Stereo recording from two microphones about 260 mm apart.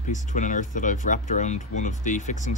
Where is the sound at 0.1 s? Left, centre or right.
Left.